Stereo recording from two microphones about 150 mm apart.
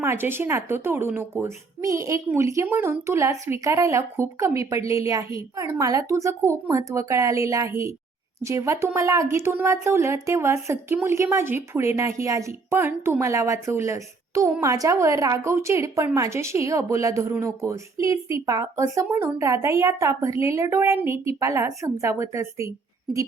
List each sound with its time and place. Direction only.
0.0 s a woman's voice: 15° right (ahead or behind)